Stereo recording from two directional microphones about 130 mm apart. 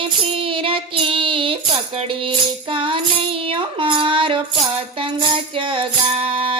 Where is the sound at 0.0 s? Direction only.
45° right (ahead or behind).